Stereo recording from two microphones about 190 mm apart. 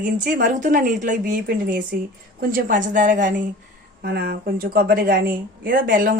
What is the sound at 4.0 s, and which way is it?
A woman's voice, 55° right (ahead or behind).